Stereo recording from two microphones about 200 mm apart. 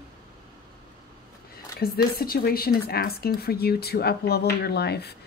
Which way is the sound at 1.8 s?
50° left (ahead or behind).